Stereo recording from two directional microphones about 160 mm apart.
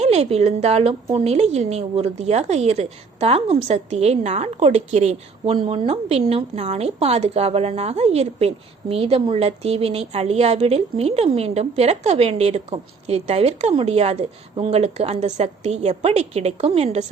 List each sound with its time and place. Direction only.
0.0 s a woman's voice: 40° right (ahead or behind)